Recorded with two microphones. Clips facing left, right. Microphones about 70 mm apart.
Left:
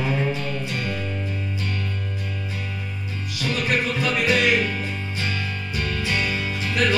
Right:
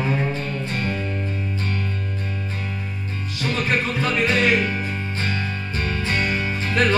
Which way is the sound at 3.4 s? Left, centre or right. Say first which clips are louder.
Right 1 dB; right.